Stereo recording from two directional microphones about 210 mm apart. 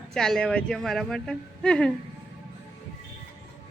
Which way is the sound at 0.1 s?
Centre (ahead or behind).